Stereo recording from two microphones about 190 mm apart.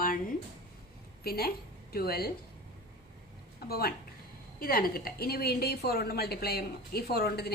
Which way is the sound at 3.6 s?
55° left (ahead or behind).